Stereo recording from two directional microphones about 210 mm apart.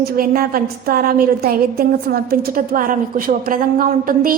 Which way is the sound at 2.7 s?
40° right (ahead or behind).